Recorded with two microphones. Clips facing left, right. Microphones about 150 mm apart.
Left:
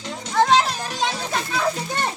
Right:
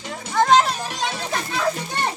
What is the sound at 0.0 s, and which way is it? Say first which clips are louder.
Children playing: left 1 dB; 5° right (ahead or behind).